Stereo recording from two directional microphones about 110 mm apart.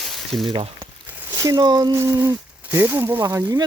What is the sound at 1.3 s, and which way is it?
Speech, 35° right (ahead or behind).